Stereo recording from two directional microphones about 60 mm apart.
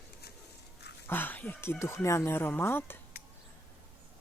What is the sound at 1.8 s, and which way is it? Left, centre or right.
Speech, left.